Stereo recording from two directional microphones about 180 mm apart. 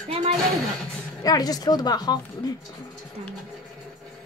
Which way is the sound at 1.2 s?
20° left (ahead or behind).